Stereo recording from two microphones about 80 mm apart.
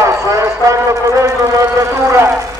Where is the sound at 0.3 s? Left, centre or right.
Right.